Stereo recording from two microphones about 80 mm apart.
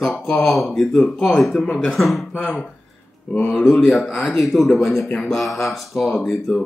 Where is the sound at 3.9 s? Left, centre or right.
Centre.